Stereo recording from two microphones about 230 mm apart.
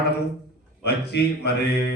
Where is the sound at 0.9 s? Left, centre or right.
Left.